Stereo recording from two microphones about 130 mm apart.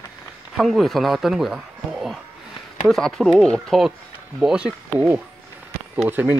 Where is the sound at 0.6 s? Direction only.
Centre (ahead or behind).